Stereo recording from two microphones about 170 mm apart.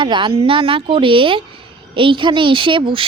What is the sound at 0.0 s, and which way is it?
A woman's voice, 30° right (ahead or behind).